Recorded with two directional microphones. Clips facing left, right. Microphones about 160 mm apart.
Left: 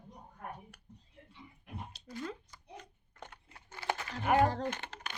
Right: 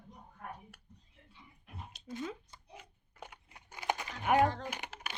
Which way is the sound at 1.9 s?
30° left (ahead or behind).